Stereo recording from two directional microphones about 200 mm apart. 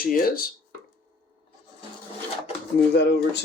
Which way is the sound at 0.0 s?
45° left (ahead or behind).